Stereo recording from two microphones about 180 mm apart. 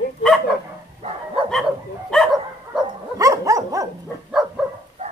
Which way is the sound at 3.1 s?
20° right (ahead or behind).